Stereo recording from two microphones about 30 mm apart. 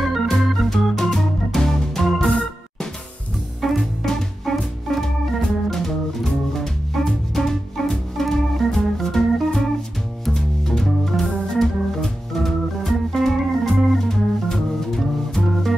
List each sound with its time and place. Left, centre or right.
0.3 s organ: centre
3.6 s music: centre
4.5 s organ: centre
6.2 s music: centre
8.2 s organ: centre
10.3 s music: centre
10.8 s organ: centre